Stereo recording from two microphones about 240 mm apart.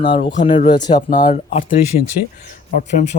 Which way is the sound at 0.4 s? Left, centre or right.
Left.